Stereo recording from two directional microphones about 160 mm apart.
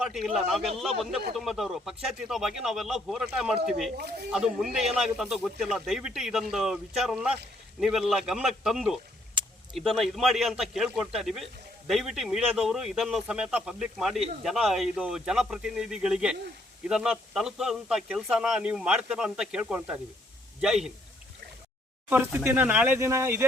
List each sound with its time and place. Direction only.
0.0 s a man's voice: centre (ahead or behind)
3.9 s speech: 85° right
4.3 s speech: 5° right (ahead or behind)
9.4 s a sound: 30° right (ahead or behind)
9.7 s speech: centre (ahead or behind)
22.1 s speech: 10° right (ahead or behind)